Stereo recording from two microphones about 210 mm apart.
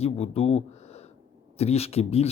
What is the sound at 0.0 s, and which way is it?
Speech, 30° left (ahead or behind).